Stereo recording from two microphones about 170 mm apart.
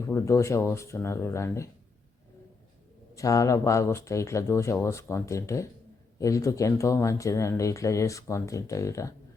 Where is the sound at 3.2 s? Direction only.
20° left (ahead or behind).